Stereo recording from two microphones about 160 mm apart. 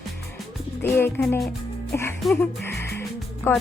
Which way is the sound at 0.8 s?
15° left (ahead or behind).